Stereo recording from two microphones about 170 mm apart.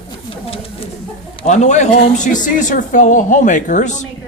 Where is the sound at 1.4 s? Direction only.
45° left (ahead or behind).